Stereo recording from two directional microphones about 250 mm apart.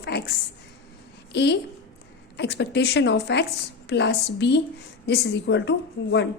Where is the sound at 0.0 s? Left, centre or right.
Left.